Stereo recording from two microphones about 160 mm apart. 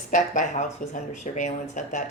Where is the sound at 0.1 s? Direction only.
50° left (ahead or behind).